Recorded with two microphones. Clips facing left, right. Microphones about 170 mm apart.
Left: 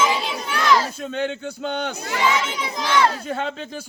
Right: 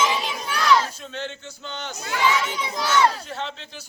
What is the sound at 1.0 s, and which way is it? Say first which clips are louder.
A man's voice: left 8 dB; 55° left (ahead or behind).